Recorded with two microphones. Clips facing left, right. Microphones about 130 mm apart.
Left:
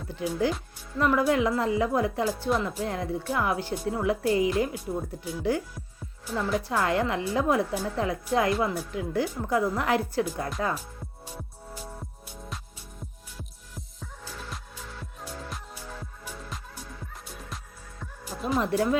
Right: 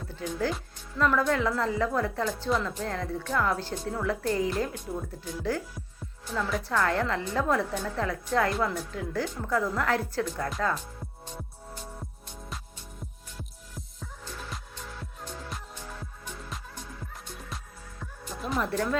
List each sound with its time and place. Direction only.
0.1 s speech: 15° left (ahead or behind)
6.7 s speech: 15° left (ahead or behind)
11.3 s music: 5° left (ahead or behind)
15.2 s music: 5° left (ahead or behind)
18.0 s music: centre (ahead or behind)
18.6 s speech: 15° left (ahead or behind)